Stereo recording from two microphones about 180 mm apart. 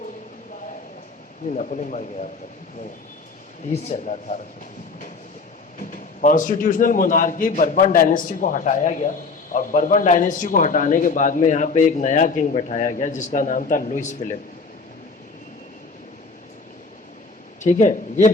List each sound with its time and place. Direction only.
1.5 s speech: 40° left (ahead or behind)
3.7 s speech: 40° left (ahead or behind)
6.2 s a man's voice: 45° left (ahead or behind)
17.6 s a man's voice: 45° left (ahead or behind)